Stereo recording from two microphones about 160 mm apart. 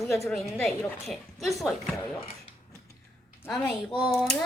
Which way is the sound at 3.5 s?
5° left (ahead or behind).